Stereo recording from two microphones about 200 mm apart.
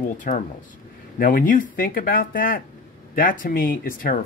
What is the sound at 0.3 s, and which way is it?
Speech, 45° left (ahead or behind).